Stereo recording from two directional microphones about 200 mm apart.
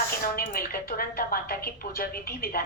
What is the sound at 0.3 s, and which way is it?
A woman's voice, 45° left (ahead or behind).